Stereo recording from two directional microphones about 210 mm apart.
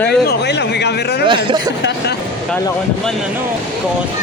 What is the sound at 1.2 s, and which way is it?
Speech, 25° right (ahead or behind).